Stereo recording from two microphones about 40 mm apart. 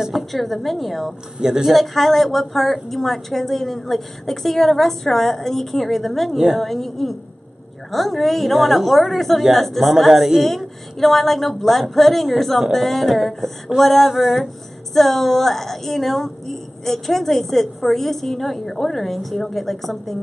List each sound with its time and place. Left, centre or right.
0.0 s a woman's voice: centre
1.4 s speech: centre
1.7 s a woman's voice: centre
15.0 s a woman's voice: centre